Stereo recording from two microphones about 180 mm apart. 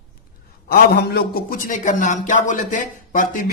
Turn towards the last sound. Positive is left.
turn(degrees=50)  # may be behind; listen again after turning